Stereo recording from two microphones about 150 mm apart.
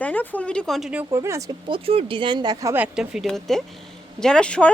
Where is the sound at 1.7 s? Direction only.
35° right (ahead or behind).